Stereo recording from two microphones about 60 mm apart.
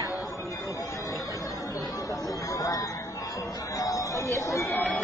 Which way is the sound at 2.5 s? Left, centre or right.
Left.